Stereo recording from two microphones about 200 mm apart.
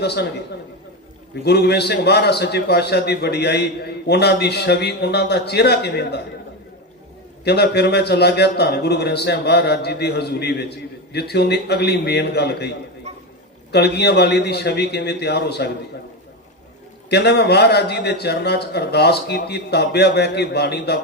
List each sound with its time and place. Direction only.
0.0 s a man's voice: 55° left (ahead or behind)
1.5 s a man's voice: 55° left (ahead or behind)
7.4 s a man's voice: 55° left (ahead or behind)
17.1 s a man's voice: 55° left (ahead or behind)